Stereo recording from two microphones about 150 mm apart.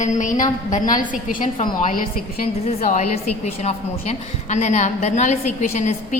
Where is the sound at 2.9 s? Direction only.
50° left (ahead or behind).